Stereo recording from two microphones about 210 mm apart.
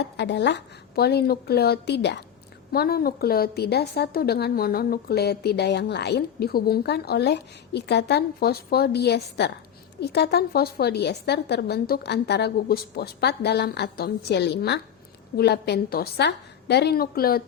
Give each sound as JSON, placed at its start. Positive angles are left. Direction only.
{"t": 0.0, "sound": "a woman's voice", "side_deg": 55}